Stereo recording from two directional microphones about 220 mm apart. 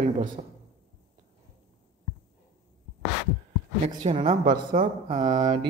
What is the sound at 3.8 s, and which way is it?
Speech, 30° right (ahead or behind).